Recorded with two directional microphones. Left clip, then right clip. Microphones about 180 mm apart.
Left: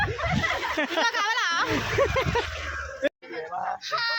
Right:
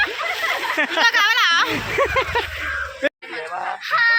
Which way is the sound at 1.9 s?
25° right (ahead or behind).